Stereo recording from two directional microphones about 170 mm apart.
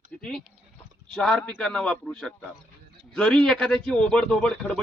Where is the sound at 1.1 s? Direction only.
5° left (ahead or behind).